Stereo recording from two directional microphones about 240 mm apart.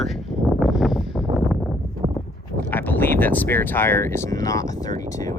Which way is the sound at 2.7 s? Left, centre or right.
Centre.